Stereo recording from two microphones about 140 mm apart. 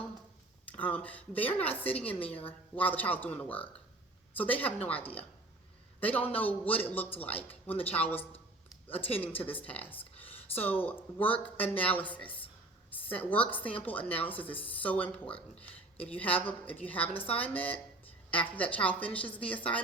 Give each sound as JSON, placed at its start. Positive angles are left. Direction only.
{"t": 0.7, "sound": "speech", "side_deg": 10}
{"t": 7.7, "sound": "speech", "side_deg": 45}
{"t": 9.1, "sound": "speech", "side_deg": 10}
{"t": 10.0, "sound": "a sound", "side_deg": 45}
{"t": 10.6, "sound": "speech", "side_deg": 10}